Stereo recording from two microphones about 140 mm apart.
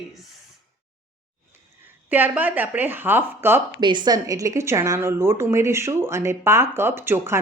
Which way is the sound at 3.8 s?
35° right (ahead or behind).